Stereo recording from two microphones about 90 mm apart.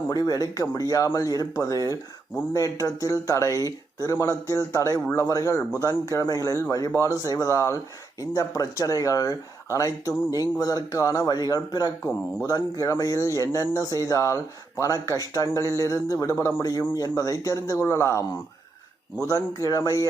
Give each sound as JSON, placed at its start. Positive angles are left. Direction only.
{"t": 0.1, "sound": "speech", "side_deg": 45}